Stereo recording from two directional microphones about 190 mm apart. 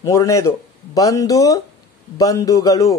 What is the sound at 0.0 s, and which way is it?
A man's voice, 15° left (ahead or behind).